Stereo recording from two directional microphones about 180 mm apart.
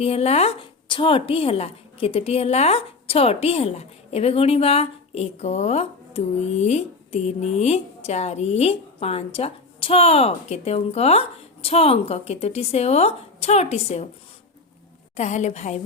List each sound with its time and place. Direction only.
0.0 s a woman's voice: 35° left (ahead or behind)
15.1 s a woman's voice: 40° left (ahead or behind)